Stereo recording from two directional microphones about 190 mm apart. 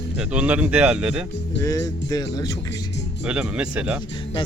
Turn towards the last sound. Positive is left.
turn(degrees=-5)  # may be behind; listen again after turning